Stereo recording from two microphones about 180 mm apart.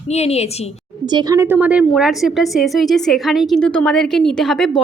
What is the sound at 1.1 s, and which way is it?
A woman's voice, 15° right (ahead or behind).